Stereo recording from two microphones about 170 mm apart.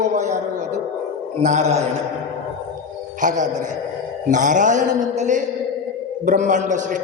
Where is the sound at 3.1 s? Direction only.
45° right (ahead or behind).